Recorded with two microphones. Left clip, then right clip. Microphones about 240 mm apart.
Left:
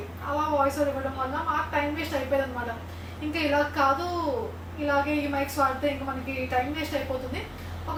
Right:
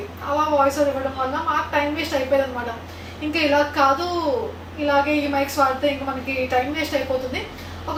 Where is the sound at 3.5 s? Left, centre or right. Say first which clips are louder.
Right 5 dB; centre.